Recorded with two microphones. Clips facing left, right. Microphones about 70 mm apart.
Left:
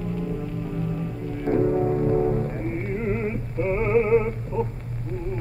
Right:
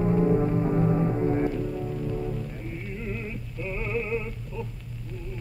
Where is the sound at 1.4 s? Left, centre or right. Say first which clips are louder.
Left 8 dB; left.